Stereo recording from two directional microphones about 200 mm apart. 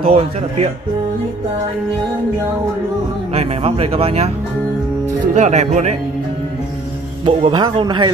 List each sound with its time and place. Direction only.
0.1 s speech: 30° right (ahead or behind)
3.3 s speech: 30° right (ahead or behind)
7.2 s a man's voice: 25° right (ahead or behind)